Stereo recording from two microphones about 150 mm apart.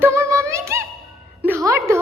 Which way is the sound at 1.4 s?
15° right (ahead or behind).